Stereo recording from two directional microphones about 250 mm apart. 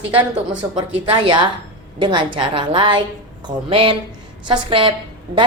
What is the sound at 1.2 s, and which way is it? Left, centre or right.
A woman's voice, centre.